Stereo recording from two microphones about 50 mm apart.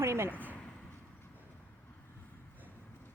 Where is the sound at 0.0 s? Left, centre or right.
Right.